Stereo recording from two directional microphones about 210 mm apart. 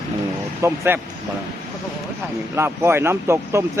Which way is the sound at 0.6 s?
10° right (ahead or behind).